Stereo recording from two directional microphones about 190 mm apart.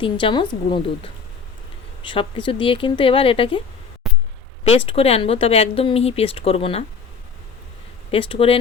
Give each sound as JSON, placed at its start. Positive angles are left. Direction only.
{"t": 0.0, "sound": "speech", "side_deg": 25}
{"t": 4.9, "sound": "speech", "side_deg": 30}
{"t": 8.1, "sound": "speech", "side_deg": 30}